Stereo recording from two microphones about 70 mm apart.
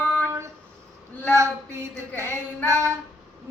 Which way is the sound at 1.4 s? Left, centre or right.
Right.